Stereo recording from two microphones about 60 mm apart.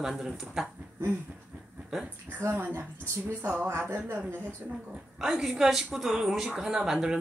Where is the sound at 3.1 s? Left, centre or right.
Right.